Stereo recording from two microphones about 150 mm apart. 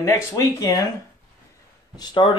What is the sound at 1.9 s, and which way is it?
Speech, 30° left (ahead or behind).